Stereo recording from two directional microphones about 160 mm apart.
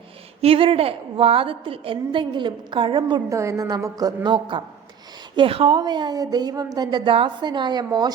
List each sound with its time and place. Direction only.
0.4 s a woman's voice: 35° right (ahead or behind)
3.2 s a woman's voice: 20° right (ahead or behind)